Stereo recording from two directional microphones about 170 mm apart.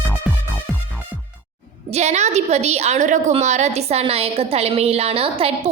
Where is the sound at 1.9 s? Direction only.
40° right (ahead or behind).